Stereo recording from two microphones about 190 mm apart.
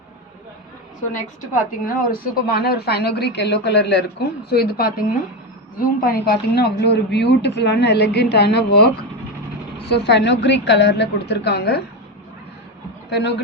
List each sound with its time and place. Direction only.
1.8 s a woman's voice: 50° left (ahead or behind)
13.1 s speech: 60° left (ahead or behind)